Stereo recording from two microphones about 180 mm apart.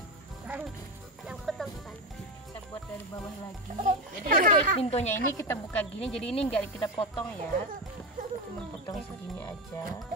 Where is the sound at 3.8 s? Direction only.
50° right (ahead or behind).